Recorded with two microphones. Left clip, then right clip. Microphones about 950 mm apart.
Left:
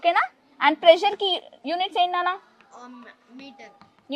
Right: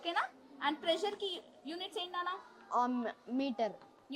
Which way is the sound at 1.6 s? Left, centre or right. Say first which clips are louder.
Left 19 dB; left.